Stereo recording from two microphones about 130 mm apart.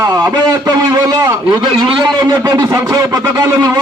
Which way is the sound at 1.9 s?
35° right (ahead or behind).